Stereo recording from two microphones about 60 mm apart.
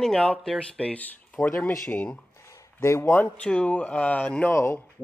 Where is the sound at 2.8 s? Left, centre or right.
Left.